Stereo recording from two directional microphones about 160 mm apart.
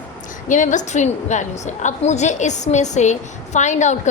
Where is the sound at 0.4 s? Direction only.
50° left (ahead or behind).